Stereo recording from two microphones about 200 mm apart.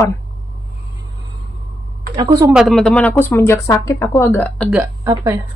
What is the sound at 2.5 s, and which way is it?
Speech, centre (ahead or behind).